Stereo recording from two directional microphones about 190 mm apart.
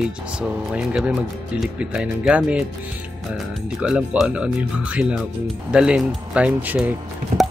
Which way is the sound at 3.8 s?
5° right (ahead or behind).